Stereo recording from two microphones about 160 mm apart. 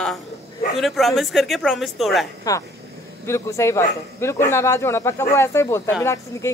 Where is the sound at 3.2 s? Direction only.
15° left (ahead or behind).